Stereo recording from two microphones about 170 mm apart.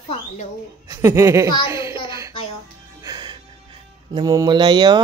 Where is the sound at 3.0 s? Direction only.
25° right (ahead or behind).